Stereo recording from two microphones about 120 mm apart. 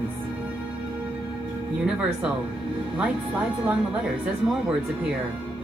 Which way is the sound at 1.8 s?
10° right (ahead or behind).